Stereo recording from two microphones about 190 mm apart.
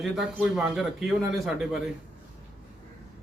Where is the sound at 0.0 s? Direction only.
5° right (ahead or behind).